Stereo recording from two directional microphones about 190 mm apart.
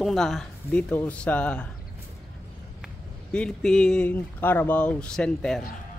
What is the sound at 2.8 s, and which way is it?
Speech, 5° left (ahead or behind).